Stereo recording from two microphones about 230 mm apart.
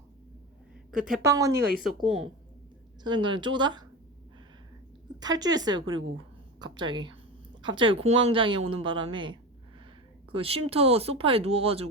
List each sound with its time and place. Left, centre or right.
0.9 s a woman's voice: centre
1.2 s a woman's voice: centre
1.8 s speech: centre
3.0 s a woman's voice: centre
5.2 s a woman's voice: centre